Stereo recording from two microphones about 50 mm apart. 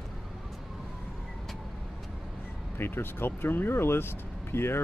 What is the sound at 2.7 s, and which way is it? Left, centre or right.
Speech, left.